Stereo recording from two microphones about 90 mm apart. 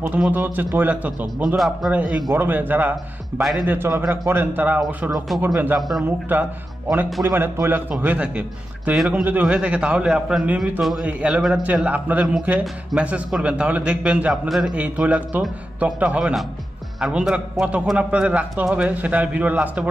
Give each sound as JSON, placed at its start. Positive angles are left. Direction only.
{"t": 0.3, "sound": "a man's voice", "side_deg": -20}
{"t": 3.3, "sound": "a man's voice", "side_deg": -5}
{"t": 3.6, "sound": "a man's voice", "side_deg": -25}
{"t": 5.3, "sound": "a man's voice", "side_deg": 0}
{"t": 6.0, "sound": "a man's voice", "side_deg": -20}
{"t": 10.8, "sound": "a man's voice", "side_deg": 0}
{"t": 11.1, "sound": "a man's voice", "side_deg": -15}